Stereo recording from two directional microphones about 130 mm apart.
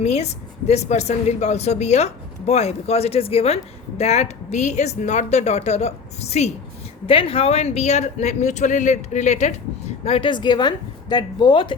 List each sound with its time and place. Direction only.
0.0 s a woman's voice: 60° left (ahead or behind)
7.1 s speech: 45° left (ahead or behind)